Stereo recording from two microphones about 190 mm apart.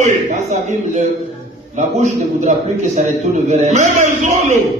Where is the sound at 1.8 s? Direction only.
40° right (ahead or behind).